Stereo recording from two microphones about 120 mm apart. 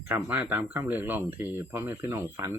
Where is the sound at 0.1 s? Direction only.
15° right (ahead or behind).